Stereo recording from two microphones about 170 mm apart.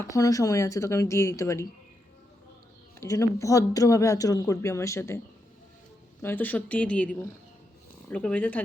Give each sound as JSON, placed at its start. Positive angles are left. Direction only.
{"t": 0.0, "sound": "a woman's voice", "side_deg": 20}
{"t": 3.0, "sound": "a woman's voice", "side_deg": 15}
{"t": 6.2, "sound": "a woman's voice", "side_deg": 10}